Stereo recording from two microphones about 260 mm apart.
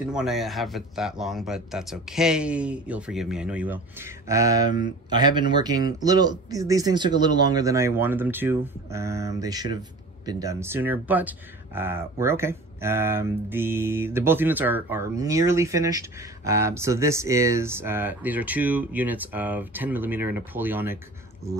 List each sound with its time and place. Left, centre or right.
0.1 s speech: centre